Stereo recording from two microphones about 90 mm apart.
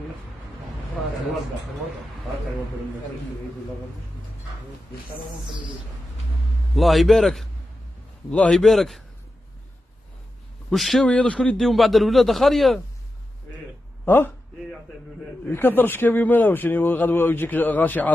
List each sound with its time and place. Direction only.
6.7 s a man's voice: centre (ahead or behind)
10.7 s a man's voice: centre (ahead or behind)
11.1 s a man's voice: 10° left (ahead or behind)
14.0 s speech: 25° left (ahead or behind)
15.5 s speech: 25° left (ahead or behind)